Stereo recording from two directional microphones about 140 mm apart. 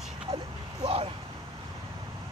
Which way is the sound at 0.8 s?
40° right (ahead or behind).